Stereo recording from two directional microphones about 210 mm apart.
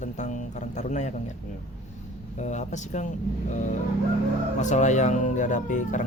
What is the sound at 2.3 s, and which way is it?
Speech, 35° left (ahead or behind).